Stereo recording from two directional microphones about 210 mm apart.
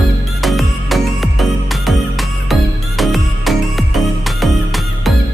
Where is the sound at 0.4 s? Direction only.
Centre (ahead or behind).